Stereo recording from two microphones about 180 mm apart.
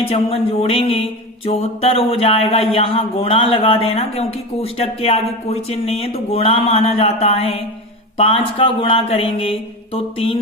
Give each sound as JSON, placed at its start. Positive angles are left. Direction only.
{"t": 0.1, "sound": "speech", "side_deg": 35}